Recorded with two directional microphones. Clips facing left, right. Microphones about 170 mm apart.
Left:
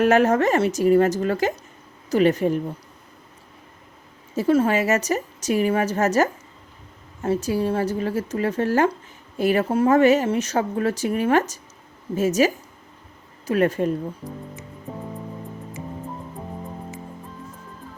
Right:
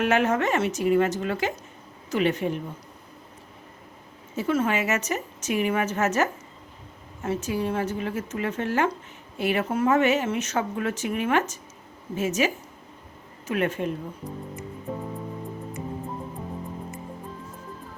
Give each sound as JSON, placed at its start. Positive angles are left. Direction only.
{"t": 0.0, "sound": "speech", "side_deg": 40}
{"t": 4.4, "sound": "speech", "side_deg": 35}
{"t": 13.5, "sound": "speech", "side_deg": 40}